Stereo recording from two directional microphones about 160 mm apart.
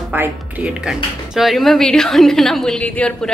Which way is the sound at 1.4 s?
Centre (ahead or behind).